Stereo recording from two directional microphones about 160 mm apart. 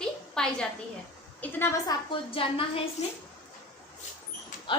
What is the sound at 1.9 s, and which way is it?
Speech, 35° left (ahead or behind).